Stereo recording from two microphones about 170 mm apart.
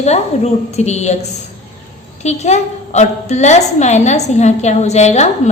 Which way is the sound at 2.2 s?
40° left (ahead or behind).